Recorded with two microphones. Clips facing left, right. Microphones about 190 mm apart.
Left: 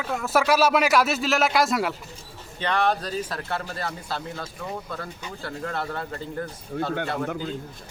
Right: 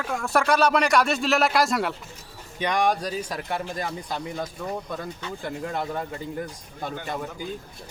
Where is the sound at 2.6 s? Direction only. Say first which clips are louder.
Right 1 dB; 15° right (ahead or behind).